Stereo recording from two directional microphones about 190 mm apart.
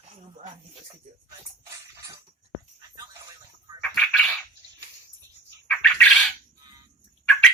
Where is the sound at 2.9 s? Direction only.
20° right (ahead or behind).